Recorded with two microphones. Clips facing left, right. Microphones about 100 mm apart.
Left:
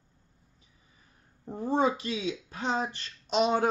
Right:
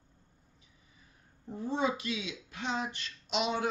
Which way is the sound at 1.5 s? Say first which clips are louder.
Left 5 dB; 45° left (ahead or behind).